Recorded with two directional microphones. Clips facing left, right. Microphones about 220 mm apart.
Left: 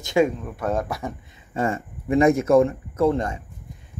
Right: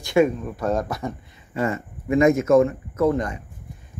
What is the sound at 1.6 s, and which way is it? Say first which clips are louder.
Speech: even; 30° left (ahead or behind).